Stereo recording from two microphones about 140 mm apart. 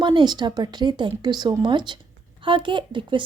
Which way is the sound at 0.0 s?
35° right (ahead or behind).